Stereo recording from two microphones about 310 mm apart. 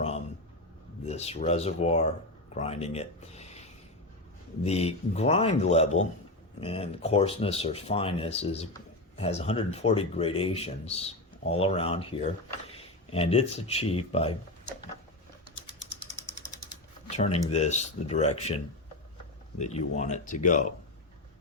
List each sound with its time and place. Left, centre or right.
1.0 s speech: left
17.1 s a sound: left
17.4 s speech: left
19.5 s speech: left